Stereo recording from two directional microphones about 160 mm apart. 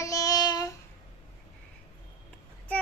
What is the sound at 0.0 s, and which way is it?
Child singing, 20° left (ahead or behind).